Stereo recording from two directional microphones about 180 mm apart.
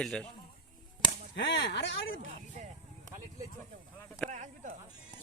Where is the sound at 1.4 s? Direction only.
80° left.